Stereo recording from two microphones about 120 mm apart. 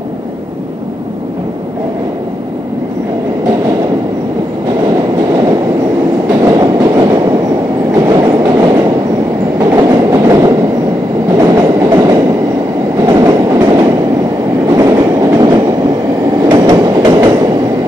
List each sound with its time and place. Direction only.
6.4 s train: 35° right (ahead or behind)